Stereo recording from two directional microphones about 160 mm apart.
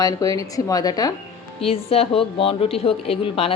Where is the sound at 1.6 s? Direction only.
35° left (ahead or behind).